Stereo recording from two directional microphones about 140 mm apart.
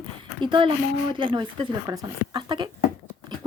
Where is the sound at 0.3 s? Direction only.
35° right (ahead or behind).